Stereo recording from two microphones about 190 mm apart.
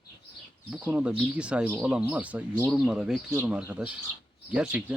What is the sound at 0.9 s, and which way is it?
Speech, 5° right (ahead or behind).